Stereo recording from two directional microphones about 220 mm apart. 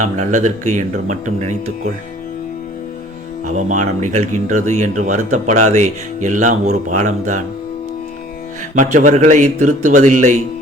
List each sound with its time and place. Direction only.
0.0 s speech: 35° right (ahead or behind)
3.5 s speech: 35° right (ahead or behind)
8.7 s speech: 35° right (ahead or behind)
9.6 s speech: 90° right
9.9 s speech: 35° right (ahead or behind)